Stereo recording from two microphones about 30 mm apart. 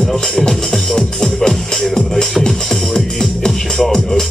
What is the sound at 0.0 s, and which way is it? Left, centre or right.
Music, centre.